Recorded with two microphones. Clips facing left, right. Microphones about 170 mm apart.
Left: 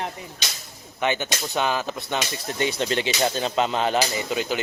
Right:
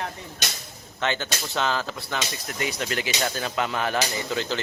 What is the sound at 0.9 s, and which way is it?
Speech, 15° left (ahead or behind).